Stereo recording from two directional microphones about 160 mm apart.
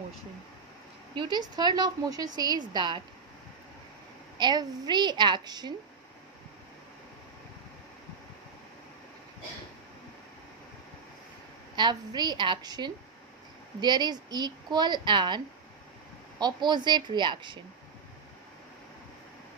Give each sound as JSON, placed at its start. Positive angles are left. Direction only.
{"t": 1.1, "sound": "a woman's voice", "side_deg": -30}
{"t": 4.4, "sound": "a woman's voice", "side_deg": -25}
{"t": 11.7, "sound": "a woman's voice", "side_deg": -25}